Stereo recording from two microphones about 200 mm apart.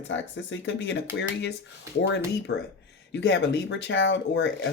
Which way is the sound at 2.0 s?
55° left (ahead or behind).